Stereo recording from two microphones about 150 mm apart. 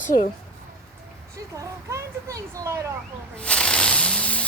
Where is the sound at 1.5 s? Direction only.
20° right (ahead or behind).